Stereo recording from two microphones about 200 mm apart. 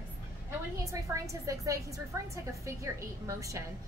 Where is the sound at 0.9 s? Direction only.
15° right (ahead or behind).